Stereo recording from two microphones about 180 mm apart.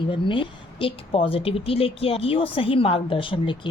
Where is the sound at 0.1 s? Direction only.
30° left (ahead or behind).